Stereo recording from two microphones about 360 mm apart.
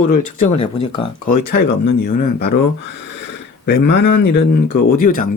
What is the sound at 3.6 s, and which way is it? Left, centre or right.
Speech, left.